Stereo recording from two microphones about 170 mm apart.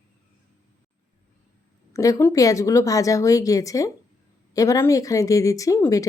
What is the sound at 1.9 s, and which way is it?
Speech, 20° left (ahead or behind).